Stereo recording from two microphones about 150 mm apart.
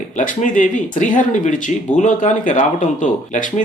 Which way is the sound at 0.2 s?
60° left (ahead or behind).